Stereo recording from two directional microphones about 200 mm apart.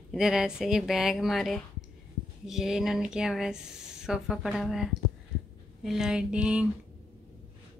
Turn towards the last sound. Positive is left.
turn(degrees=-5)  # may be behind; listen again after turning